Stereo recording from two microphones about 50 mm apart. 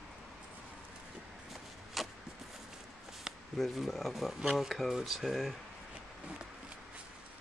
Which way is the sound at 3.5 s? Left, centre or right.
Centre.